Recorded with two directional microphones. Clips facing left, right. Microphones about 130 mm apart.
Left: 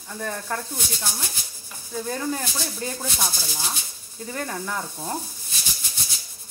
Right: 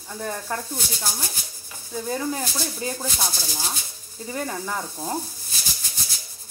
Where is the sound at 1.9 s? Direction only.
10° right (ahead or behind).